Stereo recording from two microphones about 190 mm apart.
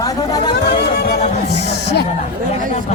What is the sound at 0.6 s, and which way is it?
Music, 55° left (ahead or behind).